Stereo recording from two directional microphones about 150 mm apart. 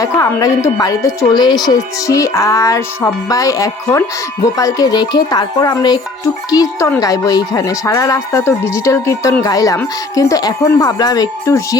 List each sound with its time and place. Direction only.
0.0 s speech: 20° left (ahead or behind)